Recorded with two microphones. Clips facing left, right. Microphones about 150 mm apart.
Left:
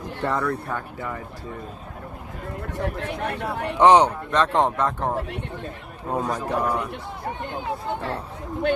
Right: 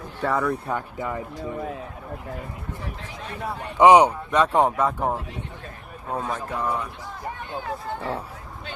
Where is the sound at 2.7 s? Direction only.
65° left (ahead or behind).